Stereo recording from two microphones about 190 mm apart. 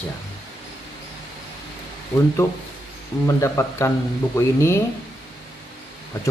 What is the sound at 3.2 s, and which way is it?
Speech, 15° left (ahead or behind).